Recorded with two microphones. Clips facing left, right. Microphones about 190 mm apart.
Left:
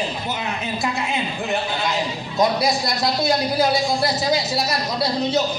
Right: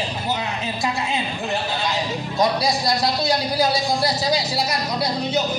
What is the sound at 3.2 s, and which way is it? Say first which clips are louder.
A man's voice: left 1 dB; 20° left (ahead or behind).